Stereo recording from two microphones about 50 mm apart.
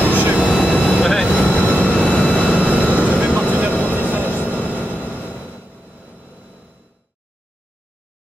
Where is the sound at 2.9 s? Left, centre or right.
Right.